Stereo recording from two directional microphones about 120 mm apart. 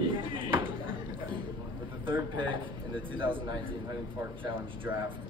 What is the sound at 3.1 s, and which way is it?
Speech, 45° right (ahead or behind).